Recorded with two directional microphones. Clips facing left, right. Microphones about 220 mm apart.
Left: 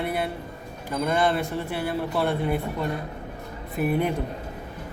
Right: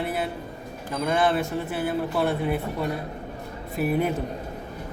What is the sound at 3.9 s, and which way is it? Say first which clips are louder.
Speech: even; 5° right (ahead or behind).